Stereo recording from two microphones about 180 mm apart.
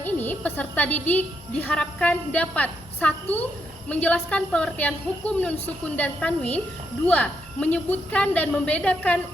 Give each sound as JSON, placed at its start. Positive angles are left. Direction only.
{"t": 0.0, "sound": "a woman's voice", "side_deg": 10}